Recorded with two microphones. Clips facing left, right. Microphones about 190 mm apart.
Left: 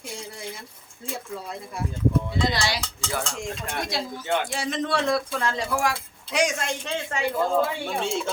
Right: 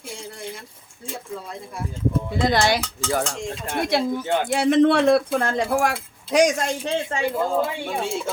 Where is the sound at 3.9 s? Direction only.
60° right (ahead or behind).